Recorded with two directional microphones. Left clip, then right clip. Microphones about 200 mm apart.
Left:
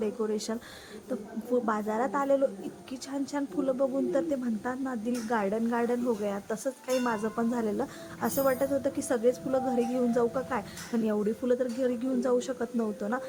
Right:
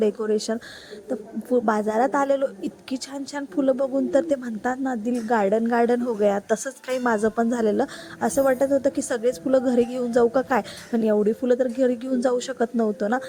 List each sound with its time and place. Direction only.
0.0 s a woman's voice: 25° right (ahead or behind)